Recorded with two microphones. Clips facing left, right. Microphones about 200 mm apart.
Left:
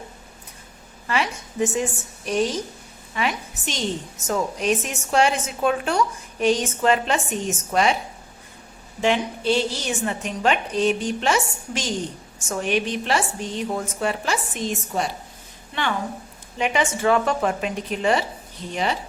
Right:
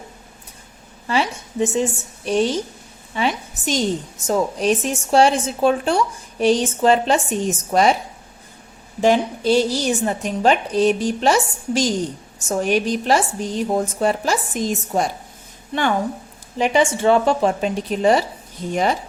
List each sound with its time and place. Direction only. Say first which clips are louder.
1.0 s a woman's voice: right 4 dB; 30° right (ahead or behind)
9.0 s a woman's voice: right 5 dB; 40° right (ahead or behind)
16.6 s a woman's voice: right 5 dB; 35° right (ahead or behind)